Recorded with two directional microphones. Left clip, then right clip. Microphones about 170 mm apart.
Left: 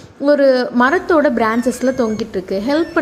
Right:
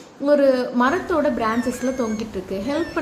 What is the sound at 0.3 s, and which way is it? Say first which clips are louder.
A woman's voice: left 5 dB; 45° left (ahead or behind).